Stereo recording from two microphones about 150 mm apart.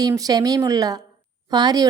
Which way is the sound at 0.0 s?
25° right (ahead or behind).